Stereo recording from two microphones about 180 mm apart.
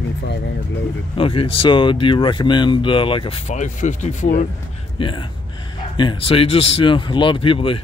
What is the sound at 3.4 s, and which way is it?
Speech, 40° left (ahead or behind).